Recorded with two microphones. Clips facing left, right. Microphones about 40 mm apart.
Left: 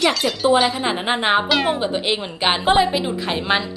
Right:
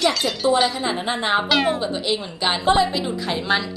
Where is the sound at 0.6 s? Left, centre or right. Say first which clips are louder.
Left 2 dB; left.